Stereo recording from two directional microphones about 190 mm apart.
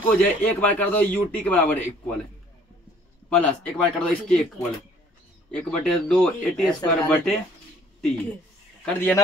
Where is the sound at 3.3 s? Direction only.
5° left (ahead or behind).